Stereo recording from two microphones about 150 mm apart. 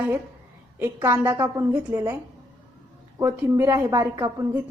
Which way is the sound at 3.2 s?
20° right (ahead or behind).